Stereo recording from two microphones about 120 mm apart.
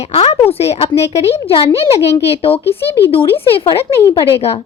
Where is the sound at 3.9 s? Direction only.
45° left (ahead or behind).